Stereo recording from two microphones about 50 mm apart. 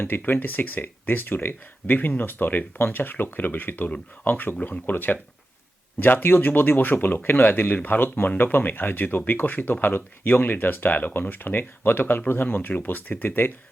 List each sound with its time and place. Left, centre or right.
0.3 s speech: left